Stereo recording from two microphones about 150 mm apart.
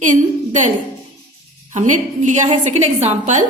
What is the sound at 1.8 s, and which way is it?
A woman's voice, 55° right (ahead or behind).